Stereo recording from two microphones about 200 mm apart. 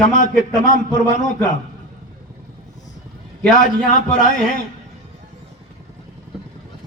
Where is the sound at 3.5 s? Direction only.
40° left (ahead or behind).